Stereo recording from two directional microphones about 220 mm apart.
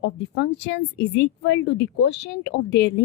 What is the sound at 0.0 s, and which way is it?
Speech, 50° left (ahead or behind).